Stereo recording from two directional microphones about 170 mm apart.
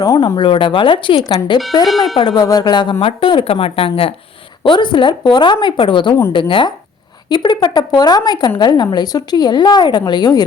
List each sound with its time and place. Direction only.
0.0 s speech: 20° left (ahead or behind)
1.8 s speech: centre (ahead or behind)
2.1 s speech: 25° left (ahead or behind)